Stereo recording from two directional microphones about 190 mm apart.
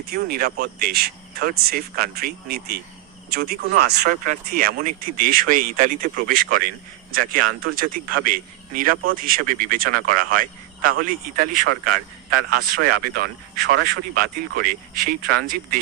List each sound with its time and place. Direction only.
0.1 s speech: 50° right (ahead or behind)